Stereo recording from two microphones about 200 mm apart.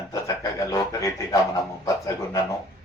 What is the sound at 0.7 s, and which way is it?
Speech, 15° left (ahead or behind).